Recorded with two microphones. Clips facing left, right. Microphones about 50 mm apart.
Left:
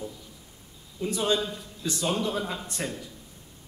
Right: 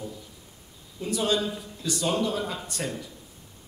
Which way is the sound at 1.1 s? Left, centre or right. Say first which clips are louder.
Right 1 dB; centre.